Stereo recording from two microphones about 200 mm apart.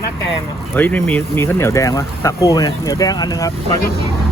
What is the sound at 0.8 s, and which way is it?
Speech, 5° left (ahead or behind).